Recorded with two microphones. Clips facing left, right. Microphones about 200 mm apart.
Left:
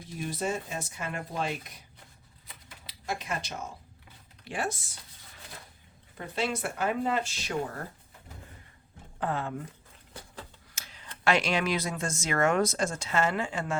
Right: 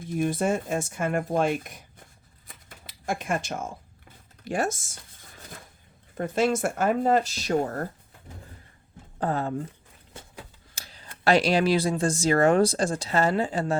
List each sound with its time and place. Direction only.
0.1 s speech: 55° right (ahead or behind)
2.5 s typewriter: 50° right (ahead or behind)
4.4 s speech: 45° right (ahead or behind)
6.1 s speech: 45° right (ahead or behind)
9.2 s speech: 40° right (ahead or behind)
10.8 s speech: 35° right (ahead or behind)